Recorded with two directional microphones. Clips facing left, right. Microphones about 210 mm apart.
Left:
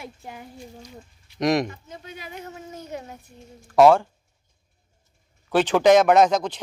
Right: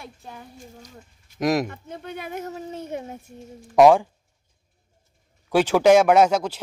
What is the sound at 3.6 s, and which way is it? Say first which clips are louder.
Speech: right 1 dB; 15° right (ahead or behind).